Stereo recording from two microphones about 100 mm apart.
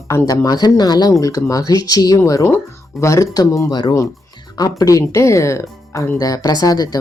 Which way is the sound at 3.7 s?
50° left (ahead or behind).